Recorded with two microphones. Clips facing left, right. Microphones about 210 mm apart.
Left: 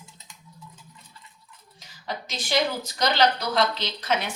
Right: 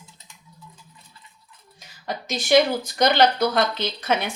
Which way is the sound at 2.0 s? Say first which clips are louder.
Right 6 dB; 50° right (ahead or behind).